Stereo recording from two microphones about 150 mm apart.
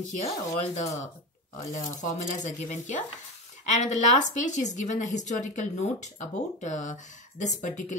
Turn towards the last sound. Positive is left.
turn(degrees=55)  # may be behind; listen again after turning